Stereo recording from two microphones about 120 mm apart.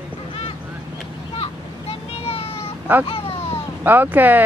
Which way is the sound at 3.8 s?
15° right (ahead or behind).